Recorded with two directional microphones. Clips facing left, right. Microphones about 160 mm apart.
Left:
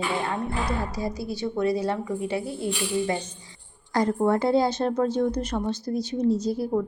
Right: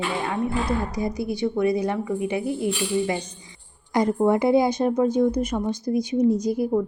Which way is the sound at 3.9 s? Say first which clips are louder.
Right 2 dB; 20° right (ahead or behind).